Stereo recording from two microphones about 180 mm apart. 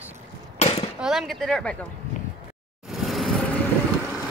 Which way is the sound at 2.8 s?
Centre (ahead or behind).